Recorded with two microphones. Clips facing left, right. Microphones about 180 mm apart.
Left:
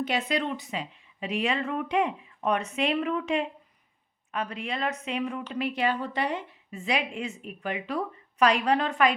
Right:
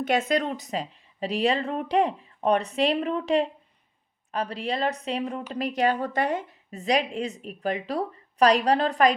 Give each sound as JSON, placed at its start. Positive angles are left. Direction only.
{"t": 0.0, "sound": "speech", "side_deg": -45}